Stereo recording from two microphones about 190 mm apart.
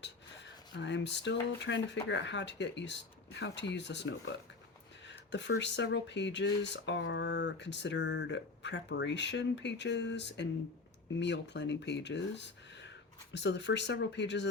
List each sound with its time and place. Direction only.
0.0 s speech: 70° left (ahead or behind)